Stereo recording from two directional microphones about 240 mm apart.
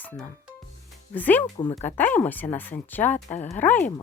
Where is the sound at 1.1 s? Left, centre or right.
Centre.